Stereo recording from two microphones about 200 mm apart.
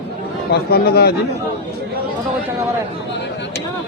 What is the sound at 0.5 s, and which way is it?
Speech, 50° left (ahead or behind).